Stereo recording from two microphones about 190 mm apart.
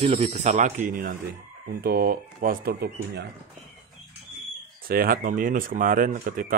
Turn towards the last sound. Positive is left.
turn(degrees=-45)  # may be behind; listen again after turning